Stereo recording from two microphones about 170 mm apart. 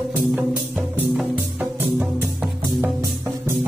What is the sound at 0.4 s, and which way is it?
Music, 5° right (ahead or behind).